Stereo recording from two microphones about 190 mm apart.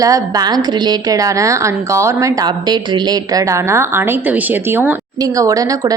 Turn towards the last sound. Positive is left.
turn(degrees=-20)  # may be behind; listen again after turning